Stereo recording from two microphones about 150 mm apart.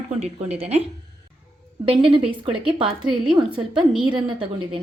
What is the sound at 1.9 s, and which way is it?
A woman's voice, 35° right (ahead or behind).